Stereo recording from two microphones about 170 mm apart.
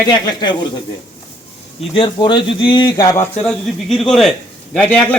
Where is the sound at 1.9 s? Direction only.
30° left (ahead or behind).